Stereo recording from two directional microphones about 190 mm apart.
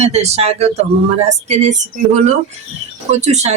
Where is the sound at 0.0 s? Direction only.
35° right (ahead or behind).